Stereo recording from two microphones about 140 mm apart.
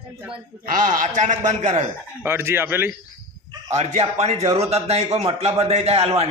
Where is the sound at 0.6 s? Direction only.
70° right (ahead or behind).